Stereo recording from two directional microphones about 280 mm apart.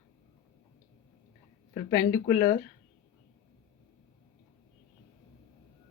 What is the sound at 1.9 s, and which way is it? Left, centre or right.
Speech, centre.